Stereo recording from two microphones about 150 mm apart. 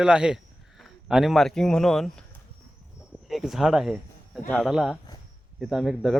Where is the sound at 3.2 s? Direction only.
Centre (ahead or behind).